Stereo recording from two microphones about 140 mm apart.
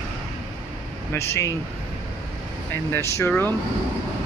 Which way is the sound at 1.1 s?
20° left (ahead or behind).